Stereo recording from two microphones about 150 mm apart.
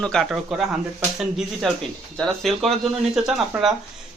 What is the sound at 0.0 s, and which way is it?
Speech, 5° left (ahead or behind).